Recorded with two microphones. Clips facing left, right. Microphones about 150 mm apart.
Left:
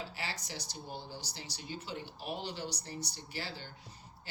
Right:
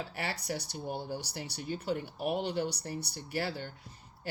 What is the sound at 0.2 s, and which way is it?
Speech, 60° right (ahead or behind).